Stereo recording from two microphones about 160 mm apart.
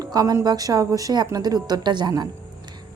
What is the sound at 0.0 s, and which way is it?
Speech, 25° right (ahead or behind).